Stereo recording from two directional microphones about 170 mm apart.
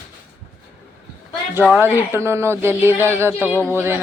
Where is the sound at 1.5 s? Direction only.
10° right (ahead or behind).